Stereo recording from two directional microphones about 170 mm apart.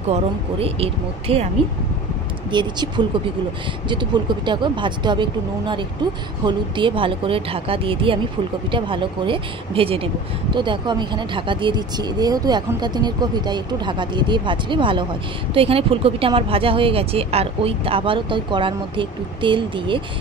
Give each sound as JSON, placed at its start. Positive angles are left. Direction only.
{"t": 0.1, "sound": "speech", "side_deg": -35}
{"t": 2.5, "sound": "speech", "side_deg": -30}